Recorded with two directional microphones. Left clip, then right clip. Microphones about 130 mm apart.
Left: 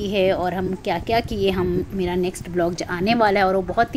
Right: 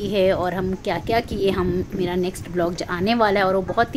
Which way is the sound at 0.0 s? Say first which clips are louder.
Even; 10° left (ahead or behind).